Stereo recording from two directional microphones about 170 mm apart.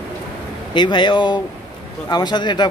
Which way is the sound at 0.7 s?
25° left (ahead or behind).